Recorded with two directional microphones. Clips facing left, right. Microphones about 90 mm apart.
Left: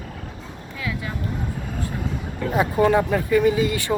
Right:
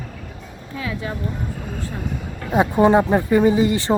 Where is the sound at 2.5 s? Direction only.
25° right (ahead or behind).